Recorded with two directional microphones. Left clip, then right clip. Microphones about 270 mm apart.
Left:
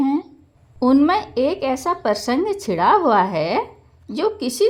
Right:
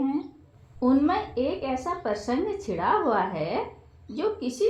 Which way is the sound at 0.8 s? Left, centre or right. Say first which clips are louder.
Left 7 dB; left.